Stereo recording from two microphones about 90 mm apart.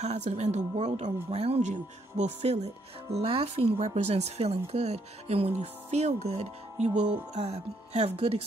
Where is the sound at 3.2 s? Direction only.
90° right.